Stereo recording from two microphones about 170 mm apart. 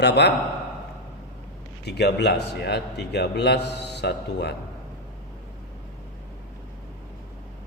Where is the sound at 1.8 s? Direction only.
75° left (ahead or behind).